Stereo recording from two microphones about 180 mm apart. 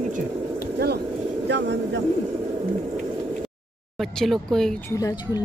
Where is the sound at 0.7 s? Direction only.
65° right (ahead or behind).